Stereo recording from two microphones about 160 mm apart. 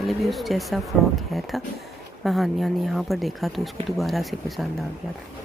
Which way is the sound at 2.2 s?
Centre (ahead or behind).